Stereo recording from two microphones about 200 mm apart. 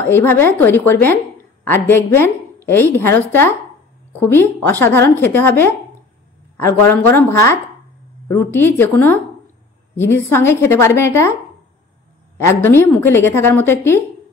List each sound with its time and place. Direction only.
0.1 s a woman's voice: 10° left (ahead or behind)
12.4 s a woman's voice: 10° left (ahead or behind)